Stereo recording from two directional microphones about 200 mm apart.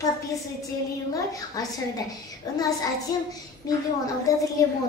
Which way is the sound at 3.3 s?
15° left (ahead or behind).